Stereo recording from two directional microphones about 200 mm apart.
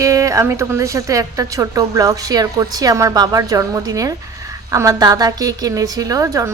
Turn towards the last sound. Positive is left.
turn(degrees=-15)  # may be behind; listen again after turning